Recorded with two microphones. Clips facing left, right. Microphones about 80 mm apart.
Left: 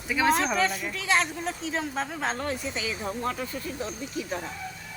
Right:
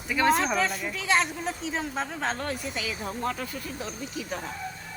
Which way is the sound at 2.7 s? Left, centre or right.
Left.